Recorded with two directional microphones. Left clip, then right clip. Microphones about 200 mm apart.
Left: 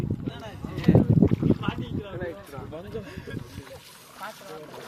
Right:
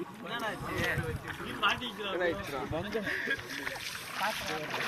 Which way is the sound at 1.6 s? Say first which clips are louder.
Right 3 dB; 50° left (ahead or behind).